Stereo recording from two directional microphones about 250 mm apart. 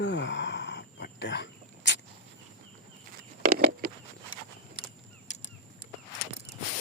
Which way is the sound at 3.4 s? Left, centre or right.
Right.